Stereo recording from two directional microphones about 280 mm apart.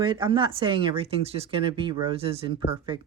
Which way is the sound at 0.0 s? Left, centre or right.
Centre.